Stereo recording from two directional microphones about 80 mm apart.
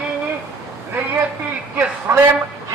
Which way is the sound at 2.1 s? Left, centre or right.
Right.